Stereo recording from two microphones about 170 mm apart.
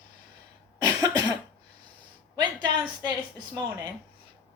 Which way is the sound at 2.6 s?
25° right (ahead or behind).